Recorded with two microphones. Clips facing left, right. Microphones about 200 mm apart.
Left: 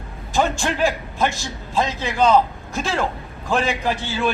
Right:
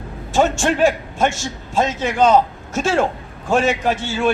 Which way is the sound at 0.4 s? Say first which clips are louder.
Right 7 dB; 45° right (ahead or behind).